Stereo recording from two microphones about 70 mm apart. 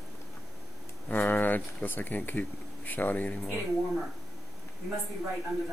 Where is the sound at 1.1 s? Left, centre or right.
Left.